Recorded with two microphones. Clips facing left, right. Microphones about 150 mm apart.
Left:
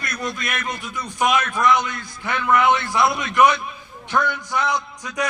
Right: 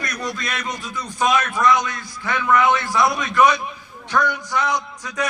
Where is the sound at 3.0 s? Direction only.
15° right (ahead or behind).